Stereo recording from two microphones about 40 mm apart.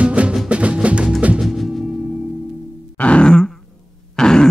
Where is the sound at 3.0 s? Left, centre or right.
Left.